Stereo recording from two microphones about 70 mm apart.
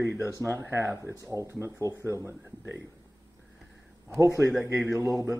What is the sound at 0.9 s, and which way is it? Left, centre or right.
Speech, left.